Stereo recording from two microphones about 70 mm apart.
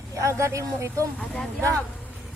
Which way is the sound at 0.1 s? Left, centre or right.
Right.